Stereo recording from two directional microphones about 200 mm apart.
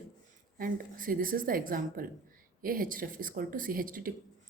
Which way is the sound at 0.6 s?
45° right (ahead or behind).